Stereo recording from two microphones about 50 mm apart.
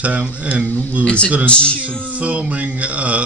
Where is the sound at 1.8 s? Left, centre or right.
Right.